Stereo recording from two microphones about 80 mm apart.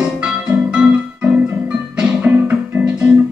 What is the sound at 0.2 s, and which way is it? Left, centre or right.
Music, centre.